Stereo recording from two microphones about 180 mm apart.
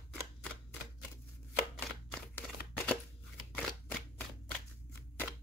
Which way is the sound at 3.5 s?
10° left (ahead or behind).